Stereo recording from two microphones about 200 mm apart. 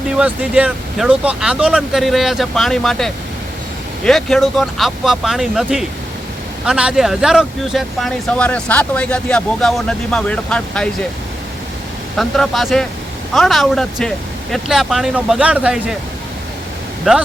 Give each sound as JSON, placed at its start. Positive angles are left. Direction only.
{"t": 0.1, "sound": "speech", "side_deg": -5}
{"t": 12.1, "sound": "speech", "side_deg": 0}
{"t": 17.1, "sound": "speech", "side_deg": -5}